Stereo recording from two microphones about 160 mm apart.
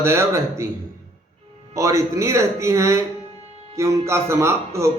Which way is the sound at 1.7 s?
20° right (ahead or behind).